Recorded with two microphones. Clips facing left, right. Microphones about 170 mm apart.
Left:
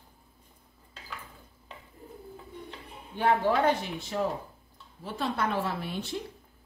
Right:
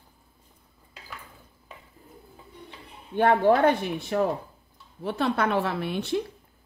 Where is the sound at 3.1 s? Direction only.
55° right (ahead or behind).